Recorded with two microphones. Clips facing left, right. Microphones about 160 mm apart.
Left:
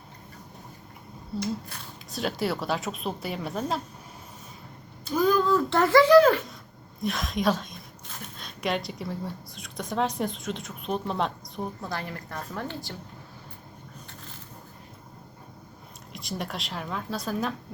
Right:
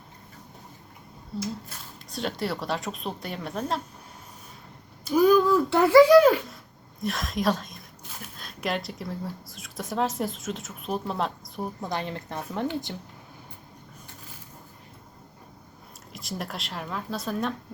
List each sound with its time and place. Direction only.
1.4 s speech: 5° right (ahead or behind)
5.0 s a woman's voice: 10° right (ahead or behind)
11.8 s a woman's voice: 20° right (ahead or behind)
16.1 s speech: centre (ahead or behind)